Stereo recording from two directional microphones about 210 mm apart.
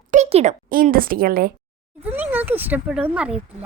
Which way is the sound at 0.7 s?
45° right (ahead or behind).